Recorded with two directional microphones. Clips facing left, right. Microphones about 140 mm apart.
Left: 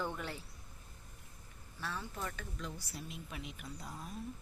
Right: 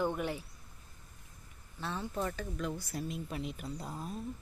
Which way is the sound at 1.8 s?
25° right (ahead or behind).